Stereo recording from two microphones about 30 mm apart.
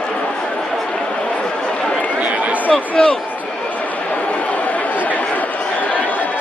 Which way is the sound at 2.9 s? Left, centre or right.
Left.